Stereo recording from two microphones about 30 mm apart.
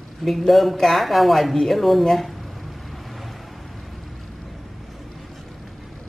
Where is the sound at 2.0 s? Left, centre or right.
Centre.